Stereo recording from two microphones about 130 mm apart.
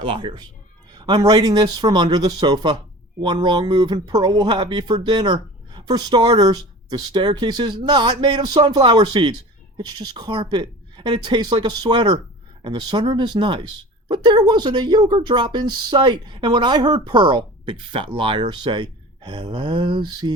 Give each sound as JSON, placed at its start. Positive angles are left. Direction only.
{"t": 0.0, "sound": "speech", "side_deg": -40}